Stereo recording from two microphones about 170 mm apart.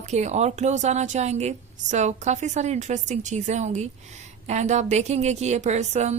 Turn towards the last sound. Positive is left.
turn(degrees=-40)  # may be behind; listen again after turning